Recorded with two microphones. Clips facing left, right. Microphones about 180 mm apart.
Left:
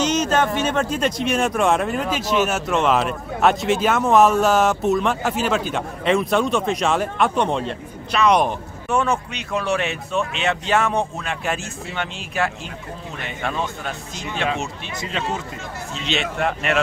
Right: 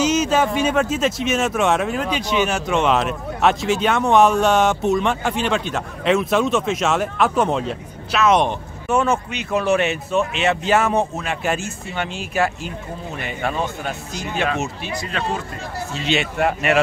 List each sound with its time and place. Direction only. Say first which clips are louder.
0.0 s speech: right 2 dB; 10° right (ahead or behind)
15.0 s speech: even; 20° left (ahead or behind)
15.9 s speech: right 3 dB; centre (ahead or behind)